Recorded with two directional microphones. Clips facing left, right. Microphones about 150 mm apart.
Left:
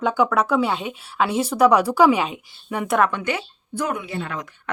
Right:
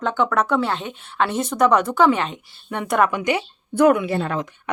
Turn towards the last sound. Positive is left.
turn(degrees=-15)  # may be behind; listen again after turning